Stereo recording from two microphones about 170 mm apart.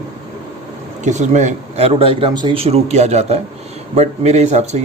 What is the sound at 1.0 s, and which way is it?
A man's voice, 45° right (ahead or behind).